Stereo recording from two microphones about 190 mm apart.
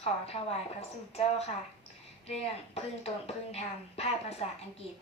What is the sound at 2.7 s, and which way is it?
Speech, 35° left (ahead or behind).